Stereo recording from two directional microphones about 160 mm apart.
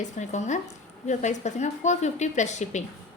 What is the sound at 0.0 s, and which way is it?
A woman's voice, 45° left (ahead or behind).